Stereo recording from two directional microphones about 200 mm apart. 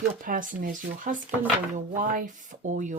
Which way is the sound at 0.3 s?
45° right (ahead or behind).